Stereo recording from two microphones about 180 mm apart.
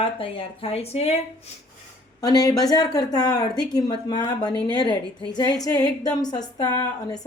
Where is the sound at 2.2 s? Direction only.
20° left (ahead or behind).